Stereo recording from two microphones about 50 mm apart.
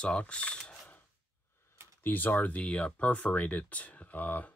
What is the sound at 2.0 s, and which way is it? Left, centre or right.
Speech, left.